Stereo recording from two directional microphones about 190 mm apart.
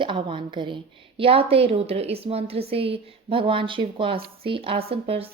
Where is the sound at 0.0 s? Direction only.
25° right (ahead or behind).